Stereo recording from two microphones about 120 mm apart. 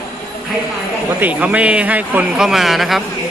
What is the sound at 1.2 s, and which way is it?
A man's voice, 15° right (ahead or behind).